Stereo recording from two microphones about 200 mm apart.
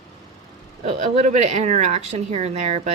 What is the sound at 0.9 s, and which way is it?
Speech, 35° right (ahead or behind).